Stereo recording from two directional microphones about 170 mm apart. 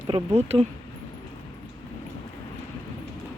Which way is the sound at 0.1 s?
40° right (ahead or behind).